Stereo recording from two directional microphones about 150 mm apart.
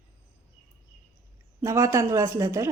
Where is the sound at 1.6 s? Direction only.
20° right (ahead or behind).